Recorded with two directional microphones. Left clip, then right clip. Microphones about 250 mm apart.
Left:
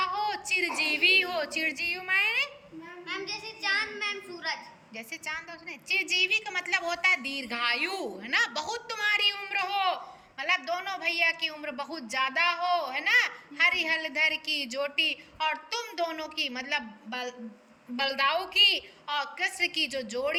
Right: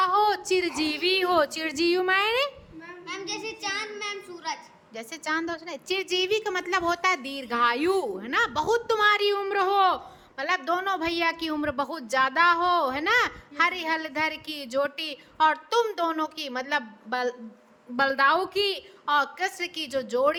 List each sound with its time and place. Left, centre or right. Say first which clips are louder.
0.0 s a woman's voice: right 7 dB; right
3.3 s child singing: left 3 dB; right
4.9 s a woman's voice: right 7 dB; right